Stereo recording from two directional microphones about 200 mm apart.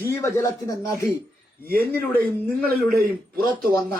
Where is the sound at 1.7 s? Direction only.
50° right (ahead or behind).